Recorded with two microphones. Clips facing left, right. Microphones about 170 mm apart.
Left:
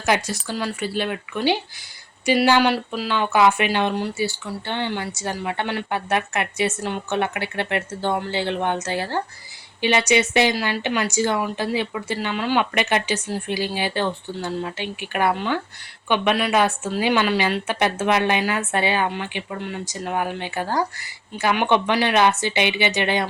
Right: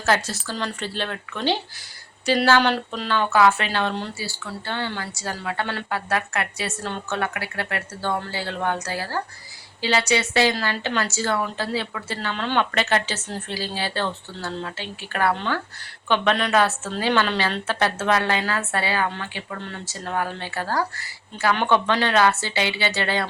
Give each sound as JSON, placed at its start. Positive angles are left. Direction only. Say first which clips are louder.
{"t": 0.0, "sound": "speech", "louder": "left 1 dB", "side_deg": 15}